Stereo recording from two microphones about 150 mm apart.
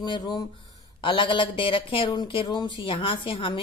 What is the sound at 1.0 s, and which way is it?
Speech, 35° left (ahead or behind).